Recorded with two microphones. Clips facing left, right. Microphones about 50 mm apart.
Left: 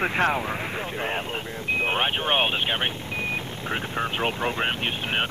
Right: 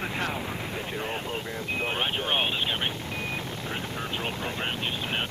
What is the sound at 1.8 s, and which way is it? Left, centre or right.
Speech, left.